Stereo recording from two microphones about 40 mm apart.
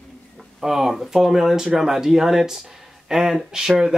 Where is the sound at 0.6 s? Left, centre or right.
Centre.